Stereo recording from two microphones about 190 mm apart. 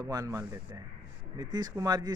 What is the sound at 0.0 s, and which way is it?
Speech, 20° right (ahead or behind).